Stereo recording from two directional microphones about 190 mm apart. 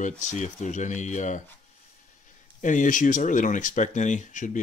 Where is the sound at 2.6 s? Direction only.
40° left (ahead or behind).